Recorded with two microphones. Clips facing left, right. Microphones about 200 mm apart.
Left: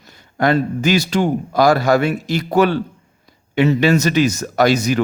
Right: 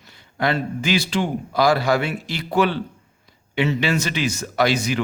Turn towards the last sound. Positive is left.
turn(degrees=40)  # may be behind; listen again after turning